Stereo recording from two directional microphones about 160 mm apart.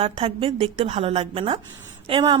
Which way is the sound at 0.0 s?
40° right (ahead or behind).